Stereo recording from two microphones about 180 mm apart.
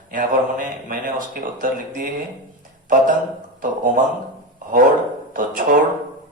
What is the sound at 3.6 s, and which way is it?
Speech, 50° right (ahead or behind).